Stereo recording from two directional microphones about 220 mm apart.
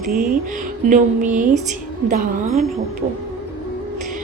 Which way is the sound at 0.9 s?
35° right (ahead or behind).